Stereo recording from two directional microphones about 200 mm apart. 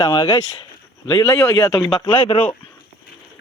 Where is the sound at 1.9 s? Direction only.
25° left (ahead or behind).